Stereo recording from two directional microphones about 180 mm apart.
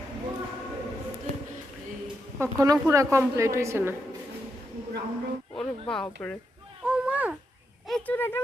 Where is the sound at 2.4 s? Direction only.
15° right (ahead or behind).